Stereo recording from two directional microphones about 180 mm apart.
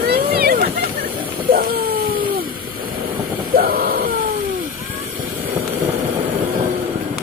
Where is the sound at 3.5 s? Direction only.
55° right (ahead or behind).